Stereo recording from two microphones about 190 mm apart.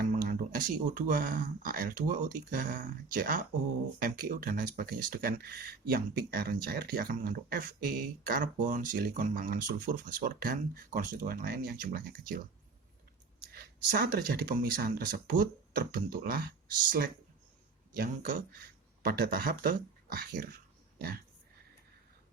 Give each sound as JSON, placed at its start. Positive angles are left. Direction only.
{"t": 0.0, "sound": "speech", "side_deg": -50}
{"t": 13.5, "sound": "speech", "side_deg": -50}
{"t": 17.9, "sound": "speech", "side_deg": -50}